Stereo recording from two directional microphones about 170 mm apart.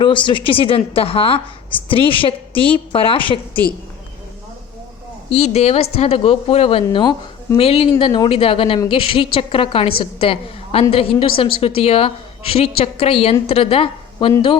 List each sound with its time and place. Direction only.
0.0 s a woman's voice: 30° left (ahead or behind)
5.3 s a woman's voice: 40° left (ahead or behind)